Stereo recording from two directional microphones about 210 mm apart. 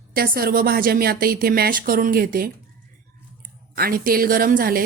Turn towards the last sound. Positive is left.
turn(degrees=-45)  # may be behind; listen again after turning